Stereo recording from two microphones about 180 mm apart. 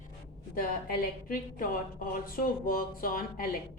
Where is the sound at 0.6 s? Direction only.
50° left (ahead or behind).